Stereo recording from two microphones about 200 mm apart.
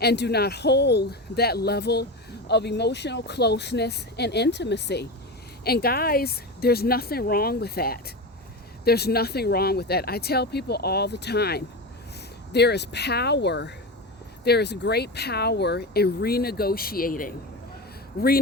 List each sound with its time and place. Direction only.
0.0 s speech: 55° left (ahead or behind)